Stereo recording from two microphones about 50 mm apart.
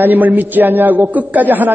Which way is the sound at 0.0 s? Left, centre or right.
Right.